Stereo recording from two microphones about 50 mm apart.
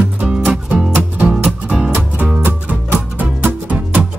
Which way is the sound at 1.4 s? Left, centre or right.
Centre.